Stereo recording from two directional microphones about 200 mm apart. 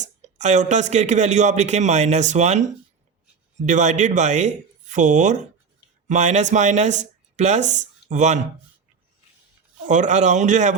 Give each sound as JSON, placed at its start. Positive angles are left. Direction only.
{"t": 0.0, "sound": "speech", "side_deg": -35}
{"t": 3.7, "sound": "speech", "side_deg": -35}
{"t": 9.8, "sound": "speech", "side_deg": -40}